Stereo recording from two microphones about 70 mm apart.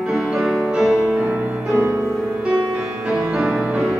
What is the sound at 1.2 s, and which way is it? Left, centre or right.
Music, centre.